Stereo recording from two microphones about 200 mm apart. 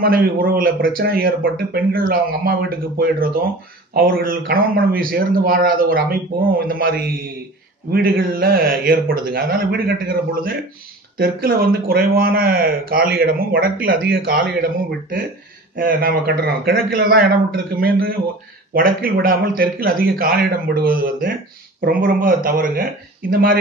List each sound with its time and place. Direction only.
0.0 s speech: 45° right (ahead or behind)